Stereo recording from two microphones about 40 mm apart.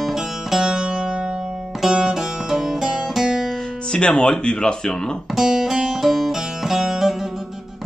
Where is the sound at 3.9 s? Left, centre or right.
Left.